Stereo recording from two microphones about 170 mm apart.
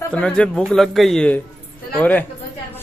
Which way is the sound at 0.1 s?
5° left (ahead or behind).